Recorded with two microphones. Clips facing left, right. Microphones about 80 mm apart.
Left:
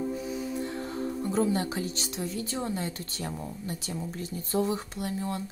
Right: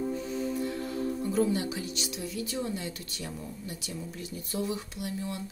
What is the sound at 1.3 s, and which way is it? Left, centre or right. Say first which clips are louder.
A woman's voice: left 1 dB; left.